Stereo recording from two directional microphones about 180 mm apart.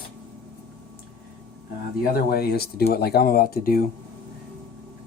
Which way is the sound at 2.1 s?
60° left (ahead or behind).